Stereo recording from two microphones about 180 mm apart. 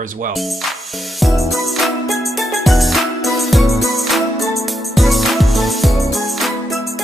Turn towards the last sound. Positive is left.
turn(degrees=0)  # may be behind; listen again after turning